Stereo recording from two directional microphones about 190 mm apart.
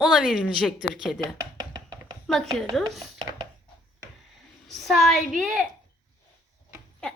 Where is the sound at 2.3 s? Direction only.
Centre (ahead or behind).